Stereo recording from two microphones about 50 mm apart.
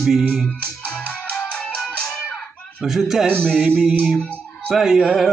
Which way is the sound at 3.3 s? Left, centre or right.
Centre.